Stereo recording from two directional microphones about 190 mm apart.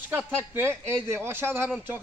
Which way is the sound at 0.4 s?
10° right (ahead or behind).